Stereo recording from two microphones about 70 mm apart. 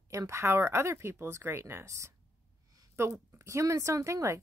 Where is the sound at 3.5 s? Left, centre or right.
Right.